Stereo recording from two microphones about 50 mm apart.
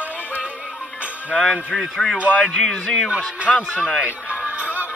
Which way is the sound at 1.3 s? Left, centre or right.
Centre.